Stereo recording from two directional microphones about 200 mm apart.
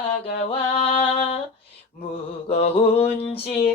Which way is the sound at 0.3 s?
35° left (ahead or behind).